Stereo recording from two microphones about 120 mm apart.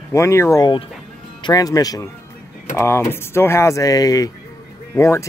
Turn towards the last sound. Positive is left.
turn(degrees=25)  # may be behind; listen again after turning